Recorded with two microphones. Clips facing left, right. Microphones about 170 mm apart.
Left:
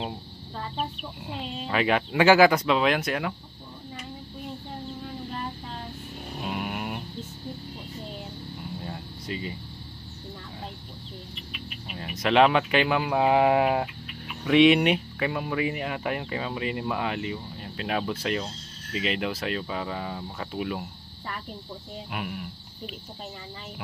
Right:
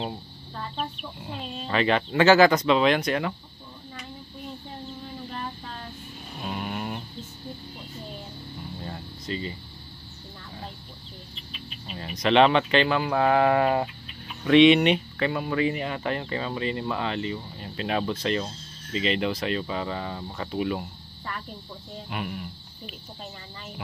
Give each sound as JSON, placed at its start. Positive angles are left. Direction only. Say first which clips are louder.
{"t": 0.7, "sound": "speech", "louder": "left 1 dB", "side_deg": 5}
{"t": 6.4, "sound": "a sound", "louder": "even", "side_deg": 10}
{"t": 8.8, "sound": "air conditioning", "louder": "even", "side_deg": 5}
{"t": 11.9, "sound": "speech", "louder": "right 2 dB", "side_deg": 5}
{"t": 22.1, "sound": "speech", "louder": "right 1 dB", "side_deg": 5}